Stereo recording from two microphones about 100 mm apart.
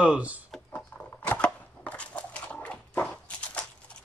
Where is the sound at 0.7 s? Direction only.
15° left (ahead or behind).